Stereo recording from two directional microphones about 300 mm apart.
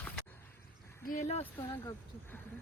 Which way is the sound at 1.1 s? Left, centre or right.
Left.